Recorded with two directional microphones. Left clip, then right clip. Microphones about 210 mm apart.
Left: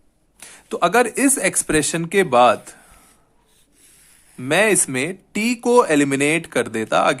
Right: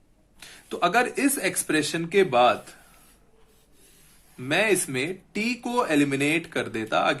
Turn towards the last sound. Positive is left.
turn(degrees=35)  # may be behind; listen again after turning